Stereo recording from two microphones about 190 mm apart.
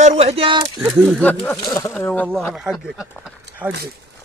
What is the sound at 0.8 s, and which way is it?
Speech, 10° right (ahead or behind).